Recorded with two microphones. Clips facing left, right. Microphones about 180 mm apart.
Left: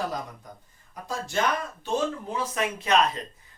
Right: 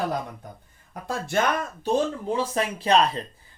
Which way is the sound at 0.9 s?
60° right (ahead or behind).